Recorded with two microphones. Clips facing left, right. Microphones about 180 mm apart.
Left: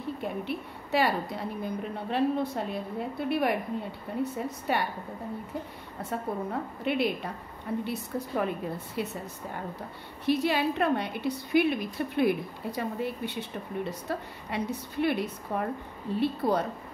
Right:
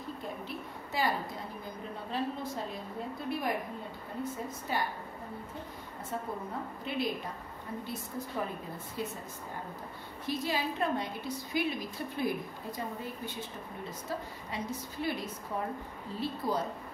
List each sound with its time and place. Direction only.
0.2 s a woman's voice: 70° left (ahead or behind)
6.8 s a woman's voice: 65° left (ahead or behind)
10.2 s a woman's voice: 65° left (ahead or behind)